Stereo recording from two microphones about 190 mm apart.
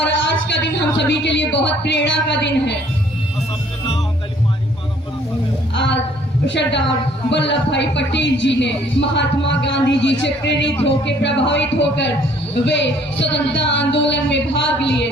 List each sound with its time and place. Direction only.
0.4 s a man's voice: 65° left (ahead or behind)
5.7 s a man's voice: 65° left (ahead or behind)
14.8 s music: 65° left (ahead or behind)